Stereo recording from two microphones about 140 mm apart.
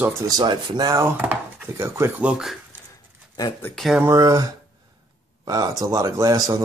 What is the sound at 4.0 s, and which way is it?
Speech, 25° right (ahead or behind).